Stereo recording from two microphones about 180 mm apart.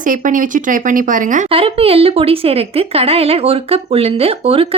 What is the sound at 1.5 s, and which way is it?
Speech, 30° right (ahead or behind).